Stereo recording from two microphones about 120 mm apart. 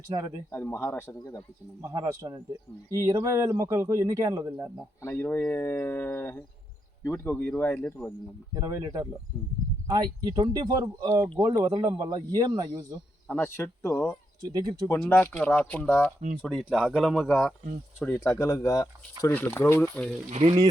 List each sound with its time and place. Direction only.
0.1 s speech: 50° right (ahead or behind)
0.5 s speech: 20° left (ahead or behind)
1.8 s speech: 30° right (ahead or behind)
5.0 s speech: 15° left (ahead or behind)
8.5 s speech: 30° right (ahead or behind)
13.2 s speech: 15° left (ahead or behind)
14.4 s speech: 35° right (ahead or behind)
15.1 s speech: 15° left (ahead or behind)
18.2 s speech: 25° left (ahead or behind)
19.3 s speech: 15° left (ahead or behind)
20.3 s speech: 55° right (ahead or behind)